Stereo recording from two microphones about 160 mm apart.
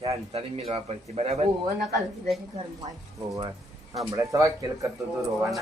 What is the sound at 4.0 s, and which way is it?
Speech, 20° right (ahead or behind).